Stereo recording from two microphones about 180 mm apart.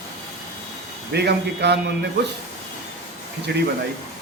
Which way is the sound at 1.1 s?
70° right (ahead or behind).